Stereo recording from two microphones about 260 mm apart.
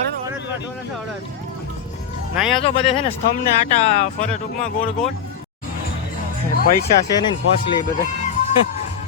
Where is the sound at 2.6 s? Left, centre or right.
Left.